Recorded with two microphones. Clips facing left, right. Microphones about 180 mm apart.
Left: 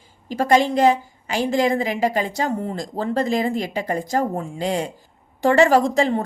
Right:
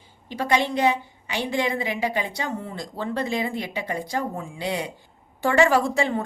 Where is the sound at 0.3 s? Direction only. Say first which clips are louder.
Left 6 dB; 45° left (ahead or behind).